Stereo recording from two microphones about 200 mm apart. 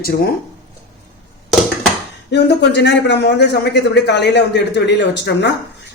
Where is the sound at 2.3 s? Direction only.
55° left (ahead or behind).